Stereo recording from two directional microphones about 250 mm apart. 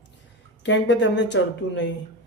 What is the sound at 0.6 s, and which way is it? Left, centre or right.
Speech, left.